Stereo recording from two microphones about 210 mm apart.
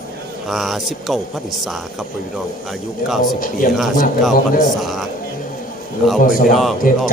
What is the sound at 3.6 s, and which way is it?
Speech, 40° left (ahead or behind).